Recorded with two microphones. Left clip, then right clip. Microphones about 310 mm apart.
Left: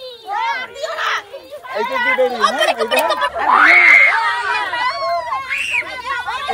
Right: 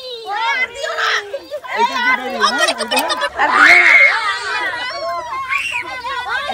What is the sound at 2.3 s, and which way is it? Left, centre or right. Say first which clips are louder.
Speech: even; left.